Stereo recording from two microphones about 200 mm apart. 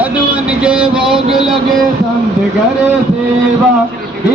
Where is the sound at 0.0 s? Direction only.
5° right (ahead or behind).